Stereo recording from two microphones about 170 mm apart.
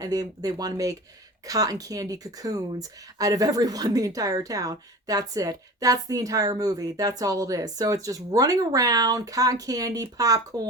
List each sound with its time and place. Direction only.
0.0 s speech: 20° right (ahead or behind)